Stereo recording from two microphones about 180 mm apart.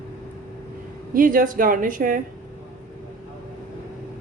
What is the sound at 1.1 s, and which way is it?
A woman's voice, 50° right (ahead or behind).